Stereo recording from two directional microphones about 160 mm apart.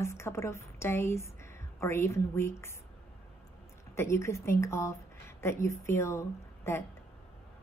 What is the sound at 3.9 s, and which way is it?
A woman's voice, 15° left (ahead or behind).